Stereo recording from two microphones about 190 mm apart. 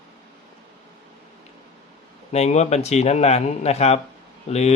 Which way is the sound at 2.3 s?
35° left (ahead or behind).